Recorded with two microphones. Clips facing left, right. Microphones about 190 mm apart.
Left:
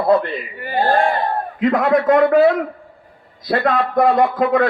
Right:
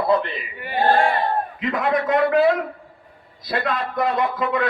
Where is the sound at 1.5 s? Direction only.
50° left (ahead or behind).